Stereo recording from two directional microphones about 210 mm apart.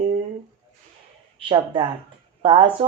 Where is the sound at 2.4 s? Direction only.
25° right (ahead or behind).